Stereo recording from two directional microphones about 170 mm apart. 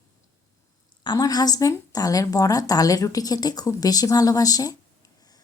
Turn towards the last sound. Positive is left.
turn(degrees=20)  # may be behind; listen again after turning